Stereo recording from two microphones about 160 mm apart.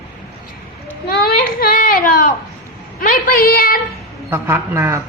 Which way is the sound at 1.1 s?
75° left (ahead or behind).